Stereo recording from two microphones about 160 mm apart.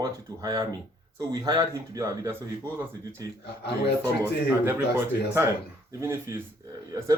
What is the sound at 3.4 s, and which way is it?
Speech, 90° left.